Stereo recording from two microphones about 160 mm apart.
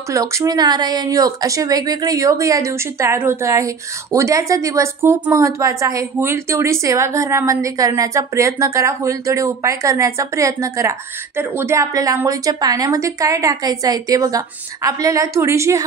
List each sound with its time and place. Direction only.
0.1 s speech: 20° right (ahead or behind)